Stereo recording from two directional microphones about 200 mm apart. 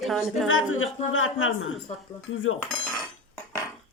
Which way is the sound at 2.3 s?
70° left (ahead or behind).